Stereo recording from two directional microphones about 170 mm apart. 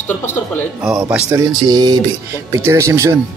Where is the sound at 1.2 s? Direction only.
20° right (ahead or behind).